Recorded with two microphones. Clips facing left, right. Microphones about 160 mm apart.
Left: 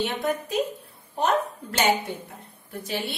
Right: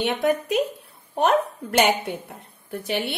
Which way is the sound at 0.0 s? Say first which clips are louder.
Right 4 dB; 65° right (ahead or behind).